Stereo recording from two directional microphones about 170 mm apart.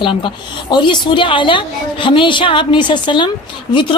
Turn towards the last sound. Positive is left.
turn(degrees=30)  # may be behind; listen again after turning